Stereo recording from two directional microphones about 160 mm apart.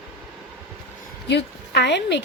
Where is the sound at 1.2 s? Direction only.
90° left.